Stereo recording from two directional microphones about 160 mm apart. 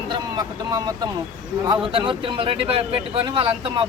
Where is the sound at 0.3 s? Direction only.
25° right (ahead or behind).